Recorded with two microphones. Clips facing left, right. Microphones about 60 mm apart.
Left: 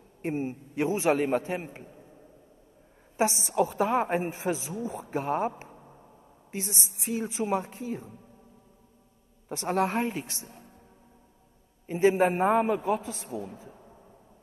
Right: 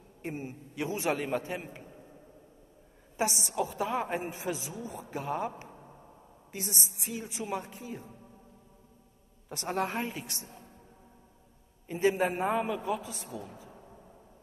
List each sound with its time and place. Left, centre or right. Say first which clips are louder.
0.2 s a woman's voice: left 7 dB; left
3.2 s a woman's voice: left 5 dB; left
6.5 s a woman's voice: left 3 dB; left
9.7 s a woman's voice: left 5 dB; left
11.9 s a woman's voice: left 5 dB; left
12.3 s a man's voice: left 6 dB; left